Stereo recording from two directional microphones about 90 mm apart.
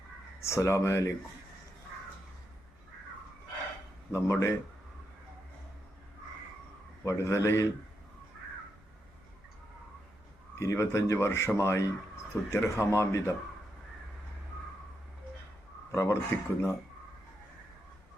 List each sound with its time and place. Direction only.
0.4 s speech: 35° left (ahead or behind)
4.1 s speech: 35° left (ahead or behind)
7.0 s speech: 35° left (ahead or behind)
10.6 s speech: 30° left (ahead or behind)
15.9 s speech: 35° left (ahead or behind)